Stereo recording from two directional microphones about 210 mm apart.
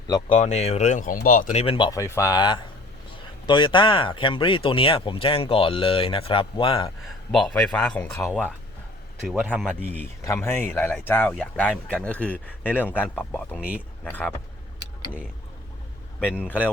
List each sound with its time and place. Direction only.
0.3 s speech: 30° left (ahead or behind)
7.3 s speech: centre (ahead or behind)
9.2 s speech: 5° right (ahead or behind)
13.6 s speech: 5° right (ahead or behind)
14.0 s speech: 5° left (ahead or behind)
16.2 s speech: 10° left (ahead or behind)